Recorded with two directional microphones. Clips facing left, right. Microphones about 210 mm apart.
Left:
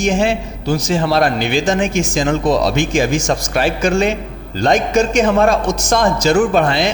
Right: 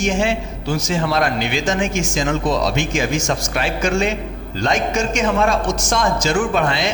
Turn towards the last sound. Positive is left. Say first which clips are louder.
# left 5 dB
turn(degrees=35)  # may be behind; listen again after turning